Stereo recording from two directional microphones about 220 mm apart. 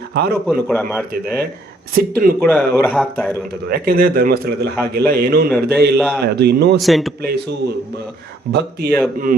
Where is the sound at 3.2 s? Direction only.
10° left (ahead or behind).